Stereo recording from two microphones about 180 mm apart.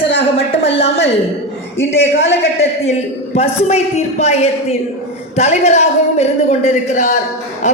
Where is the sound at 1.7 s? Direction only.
90° left.